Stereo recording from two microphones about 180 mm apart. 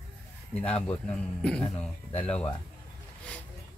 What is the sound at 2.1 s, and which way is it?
Speech, 35° left (ahead or behind).